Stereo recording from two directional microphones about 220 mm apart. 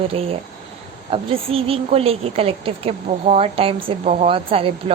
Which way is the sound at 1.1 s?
25° right (ahead or behind).